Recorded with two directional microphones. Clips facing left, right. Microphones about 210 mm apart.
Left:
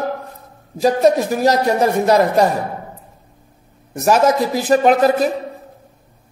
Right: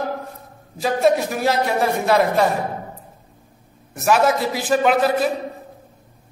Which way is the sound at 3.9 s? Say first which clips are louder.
Left 3 dB; 40° left (ahead or behind).